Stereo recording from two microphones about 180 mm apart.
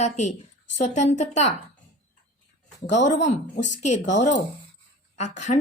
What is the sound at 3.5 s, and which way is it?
A woman's voice, 45° left (ahead or behind).